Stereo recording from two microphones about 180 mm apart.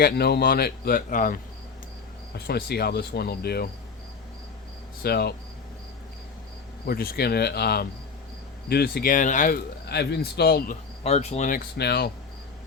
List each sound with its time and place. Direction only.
0.0 s speech: 60° left (ahead or behind)
2.3 s speech: 65° left (ahead or behind)
5.0 s speech: 60° left (ahead or behind)
6.8 s speech: 55° left (ahead or behind)
9.8 s speech: 65° left (ahead or behind)
11.0 s speech: 35° left (ahead or behind); by 12.1 s 60° left (ahead or behind)